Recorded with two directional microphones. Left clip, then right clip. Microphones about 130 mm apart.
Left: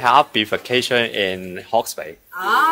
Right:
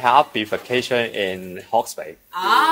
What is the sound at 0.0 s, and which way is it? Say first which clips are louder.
Speech: left 1 dB; 35° left (ahead or behind).